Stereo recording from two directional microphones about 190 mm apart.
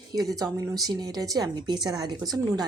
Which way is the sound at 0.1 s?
20° right (ahead or behind).